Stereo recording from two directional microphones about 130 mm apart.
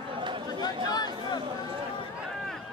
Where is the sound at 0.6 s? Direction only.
30° left (ahead or behind).